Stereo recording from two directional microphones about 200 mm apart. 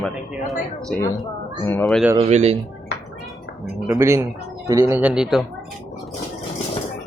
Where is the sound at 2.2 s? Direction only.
35° right (ahead or behind).